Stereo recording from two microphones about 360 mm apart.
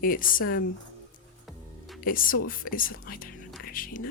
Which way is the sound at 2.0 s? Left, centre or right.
Left.